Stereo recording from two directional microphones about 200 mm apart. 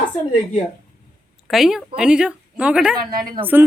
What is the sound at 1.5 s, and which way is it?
A woman's voice, centre (ahead or behind).